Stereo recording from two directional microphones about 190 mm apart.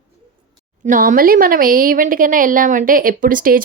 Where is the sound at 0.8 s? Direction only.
45° right (ahead or behind).